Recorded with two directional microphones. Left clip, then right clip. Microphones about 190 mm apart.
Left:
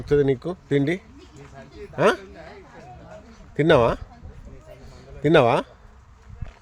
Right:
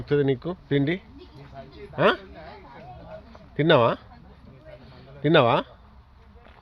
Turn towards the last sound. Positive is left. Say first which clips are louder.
# left 2 dB
turn(degrees=10)  # may be behind; listen again after turning